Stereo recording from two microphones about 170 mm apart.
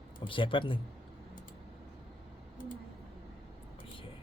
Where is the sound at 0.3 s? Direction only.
30° left (ahead or behind).